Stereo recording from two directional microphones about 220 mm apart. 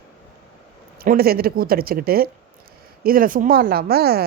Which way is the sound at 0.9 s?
45° right (ahead or behind).